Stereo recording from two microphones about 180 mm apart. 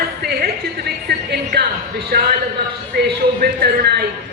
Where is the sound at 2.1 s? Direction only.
60° right (ahead or behind).